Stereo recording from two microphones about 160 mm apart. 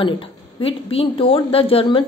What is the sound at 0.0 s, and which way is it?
A woman's voice, 35° left (ahead or behind).